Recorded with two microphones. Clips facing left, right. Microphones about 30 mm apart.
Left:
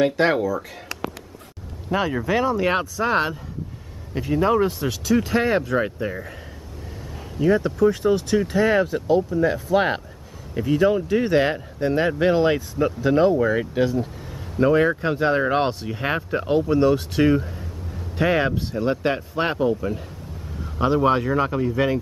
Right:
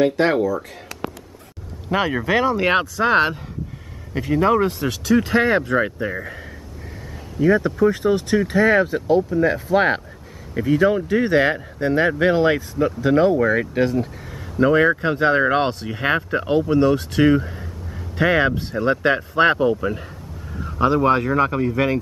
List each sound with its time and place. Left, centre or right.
0.0 s speech: centre
1.9 s speech: right
4.1 s speech: centre
7.4 s speech: centre
13.3 s speech: right
14.6 s speech: centre
17.3 s speech: right
18.1 s speech: centre
19.5 s speech: right
20.8 s speech: centre